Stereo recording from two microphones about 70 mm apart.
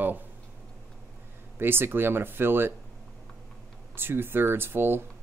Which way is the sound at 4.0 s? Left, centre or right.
Right.